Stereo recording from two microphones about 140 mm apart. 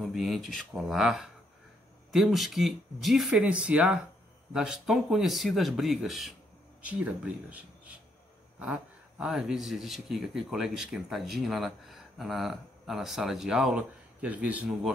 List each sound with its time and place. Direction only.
0.0 s speech: centre (ahead or behind)
9.2 s speech: 5° right (ahead or behind)